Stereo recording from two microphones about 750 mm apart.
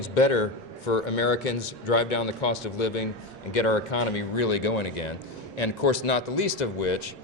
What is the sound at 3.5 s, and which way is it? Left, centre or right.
A man's voice, left.